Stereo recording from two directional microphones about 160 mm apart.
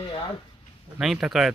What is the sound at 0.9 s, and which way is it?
Speech, 5° right (ahead or behind).